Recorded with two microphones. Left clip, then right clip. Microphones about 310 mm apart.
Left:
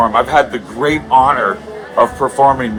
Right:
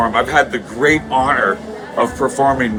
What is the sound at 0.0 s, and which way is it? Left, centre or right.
A man's voice, centre.